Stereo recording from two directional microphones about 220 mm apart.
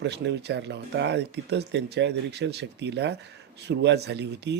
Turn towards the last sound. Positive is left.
turn(degrees=-50)  # may be behind; listen again after turning